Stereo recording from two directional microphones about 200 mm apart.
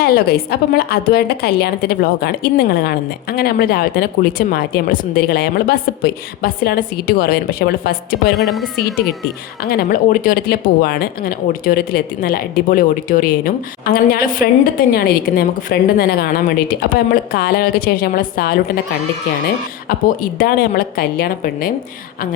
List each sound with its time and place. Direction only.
0.0 s a woman's voice: 50° left (ahead or behind)
8.4 s speech: centre (ahead or behind)
9.6 s a woman's voice: 45° left (ahead or behind)
20.4 s a woman's voice: 50° left (ahead or behind)